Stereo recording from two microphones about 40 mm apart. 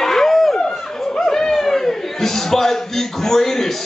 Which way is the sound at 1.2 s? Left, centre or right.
Centre.